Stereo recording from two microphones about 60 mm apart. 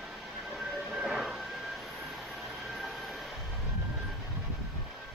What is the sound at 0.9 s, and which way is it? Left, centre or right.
Train, centre.